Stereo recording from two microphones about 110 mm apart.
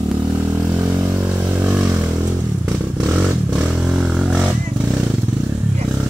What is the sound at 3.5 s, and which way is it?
Motorcycle, 10° right (ahead or behind).